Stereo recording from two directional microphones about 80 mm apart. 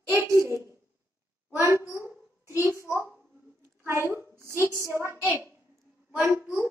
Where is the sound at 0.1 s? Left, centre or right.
Right.